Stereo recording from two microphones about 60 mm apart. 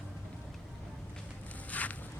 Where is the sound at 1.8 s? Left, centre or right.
Left.